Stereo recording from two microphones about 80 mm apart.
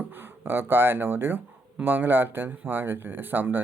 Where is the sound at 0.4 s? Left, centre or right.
Right.